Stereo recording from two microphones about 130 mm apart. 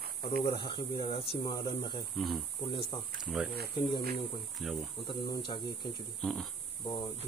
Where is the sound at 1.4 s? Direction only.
30° left (ahead or behind).